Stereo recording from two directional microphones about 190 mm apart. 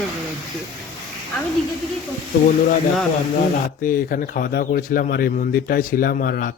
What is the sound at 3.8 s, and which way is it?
Speech, 45° left (ahead or behind).